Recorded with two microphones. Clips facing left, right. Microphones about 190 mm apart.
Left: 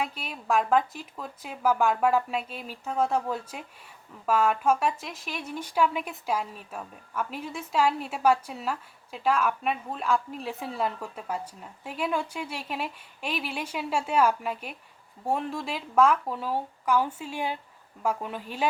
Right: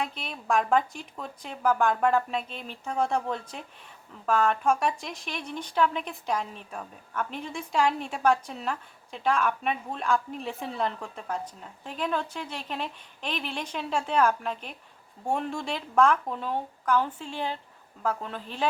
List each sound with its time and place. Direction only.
0.0 s speech: 5° left (ahead or behind)